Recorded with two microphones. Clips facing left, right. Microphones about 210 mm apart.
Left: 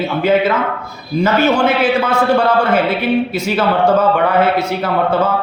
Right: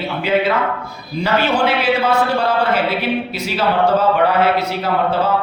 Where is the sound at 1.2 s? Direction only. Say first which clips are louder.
Left 3 dB; 45° left (ahead or behind).